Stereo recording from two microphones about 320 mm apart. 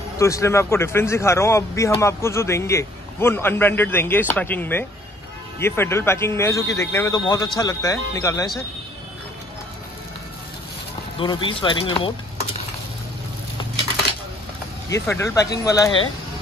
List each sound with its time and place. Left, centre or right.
0.2 s speech: centre
11.1 s speech: centre
14.9 s speech: centre